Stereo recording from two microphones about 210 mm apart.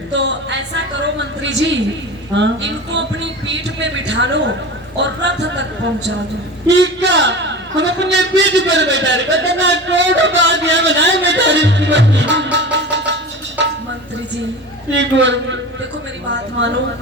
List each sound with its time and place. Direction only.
0.1 s a sound: 55° right (ahead or behind)
2.3 s a man's voice: 55° right (ahead or behind)
6.7 s a man's voice: 55° right (ahead or behind)
14.9 s a man's voice: 60° right (ahead or behind)